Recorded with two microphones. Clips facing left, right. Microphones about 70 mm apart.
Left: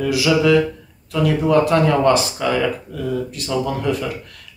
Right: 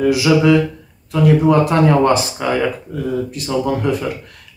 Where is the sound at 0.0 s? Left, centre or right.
Right.